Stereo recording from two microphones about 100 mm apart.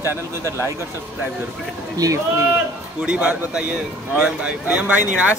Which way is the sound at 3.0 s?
10° right (ahead or behind).